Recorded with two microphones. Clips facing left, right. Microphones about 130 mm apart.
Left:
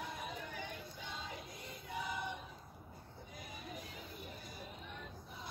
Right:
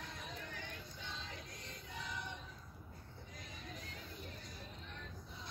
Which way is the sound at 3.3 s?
5° left (ahead or behind).